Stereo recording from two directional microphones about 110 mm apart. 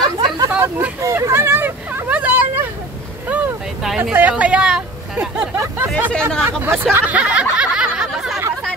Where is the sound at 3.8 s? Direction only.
5° right (ahead or behind).